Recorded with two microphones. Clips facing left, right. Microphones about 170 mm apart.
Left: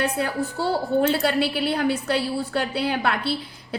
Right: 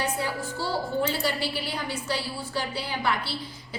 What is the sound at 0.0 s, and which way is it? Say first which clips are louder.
A woman's voice: left 5 dB; 60° left (ahead or behind).